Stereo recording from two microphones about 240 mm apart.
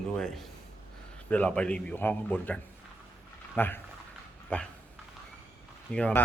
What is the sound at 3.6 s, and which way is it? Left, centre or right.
Speech, centre.